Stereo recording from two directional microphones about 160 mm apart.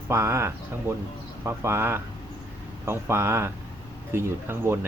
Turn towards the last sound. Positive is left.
turn(degrees=-15)  # may be behind; listen again after turning